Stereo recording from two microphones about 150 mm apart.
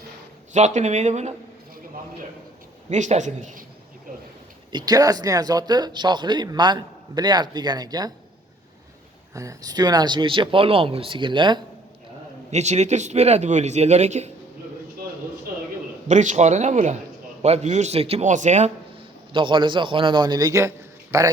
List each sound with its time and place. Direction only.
0.5 s speech: 50° right (ahead or behind)
2.9 s speech: 55° right (ahead or behind)
4.7 s speech: 25° right (ahead or behind)
9.3 s speech: 20° right (ahead or behind)
12.5 s speech: 50° right (ahead or behind)
16.0 s speech: 50° right (ahead or behind)
19.3 s speech: 35° right (ahead or behind)